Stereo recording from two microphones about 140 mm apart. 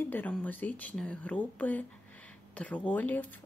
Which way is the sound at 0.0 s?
10° left (ahead or behind).